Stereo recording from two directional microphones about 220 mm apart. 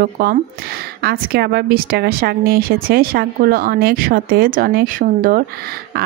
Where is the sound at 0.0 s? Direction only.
40° right (ahead or behind).